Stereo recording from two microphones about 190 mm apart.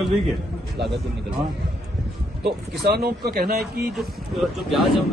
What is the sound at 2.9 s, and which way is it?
Speech, 55° right (ahead or behind).